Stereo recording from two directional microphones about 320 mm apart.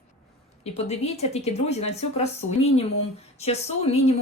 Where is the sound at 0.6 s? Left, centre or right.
Centre.